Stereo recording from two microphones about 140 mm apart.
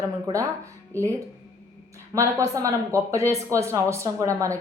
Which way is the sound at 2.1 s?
25° right (ahead or behind).